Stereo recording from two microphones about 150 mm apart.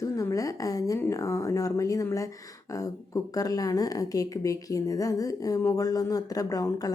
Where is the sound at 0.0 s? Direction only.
20° left (ahead or behind).